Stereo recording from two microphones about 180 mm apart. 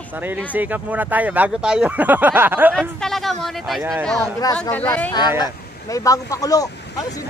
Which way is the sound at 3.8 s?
15° right (ahead or behind).